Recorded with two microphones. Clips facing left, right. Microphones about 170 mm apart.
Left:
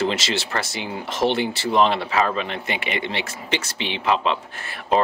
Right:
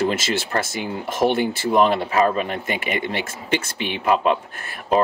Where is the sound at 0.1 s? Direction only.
50° right (ahead or behind).